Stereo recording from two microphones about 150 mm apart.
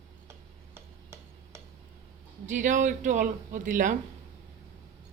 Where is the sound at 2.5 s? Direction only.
55° right (ahead or behind).